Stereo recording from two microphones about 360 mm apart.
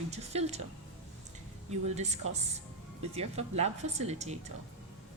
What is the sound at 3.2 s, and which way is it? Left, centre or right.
A woman's voice, centre.